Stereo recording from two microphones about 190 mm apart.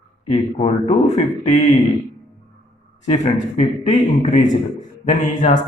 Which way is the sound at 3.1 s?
35° left (ahead or behind).